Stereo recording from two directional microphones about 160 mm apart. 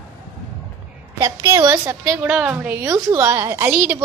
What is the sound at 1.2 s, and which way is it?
A woman's voice, 20° right (ahead or behind).